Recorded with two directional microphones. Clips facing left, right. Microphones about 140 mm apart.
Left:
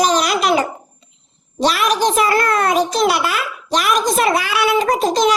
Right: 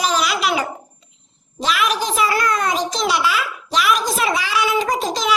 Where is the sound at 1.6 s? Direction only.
40° left (ahead or behind).